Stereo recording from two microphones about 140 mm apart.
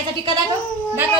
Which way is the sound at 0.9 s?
10° right (ahead or behind).